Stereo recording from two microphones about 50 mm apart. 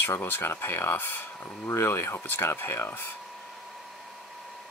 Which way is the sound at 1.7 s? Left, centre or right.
Left.